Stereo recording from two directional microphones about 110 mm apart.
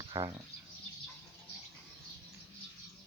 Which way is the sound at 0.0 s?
40° right (ahead or behind).